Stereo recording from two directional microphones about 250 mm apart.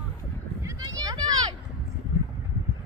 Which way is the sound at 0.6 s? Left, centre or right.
Centre.